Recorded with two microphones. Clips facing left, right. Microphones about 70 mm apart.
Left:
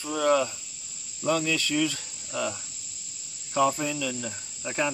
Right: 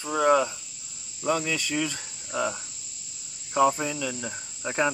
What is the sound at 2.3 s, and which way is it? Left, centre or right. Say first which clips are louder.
Cricket: right 2 dB; right.